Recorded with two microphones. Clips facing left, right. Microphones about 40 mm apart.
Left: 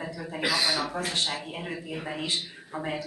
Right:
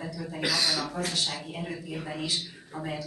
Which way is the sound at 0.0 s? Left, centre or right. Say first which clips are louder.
Left 1 dB; centre.